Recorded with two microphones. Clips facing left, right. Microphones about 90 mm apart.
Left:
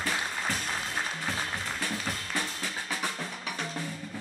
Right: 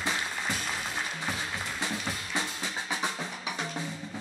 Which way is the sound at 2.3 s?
20° right (ahead or behind).